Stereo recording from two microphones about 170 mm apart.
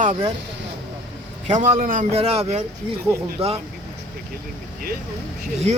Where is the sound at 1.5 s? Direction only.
45° right (ahead or behind).